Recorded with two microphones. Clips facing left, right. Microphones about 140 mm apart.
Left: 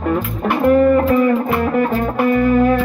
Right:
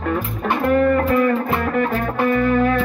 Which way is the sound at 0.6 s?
5° left (ahead or behind).